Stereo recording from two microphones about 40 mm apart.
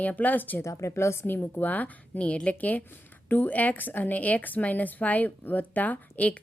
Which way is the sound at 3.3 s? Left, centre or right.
Left.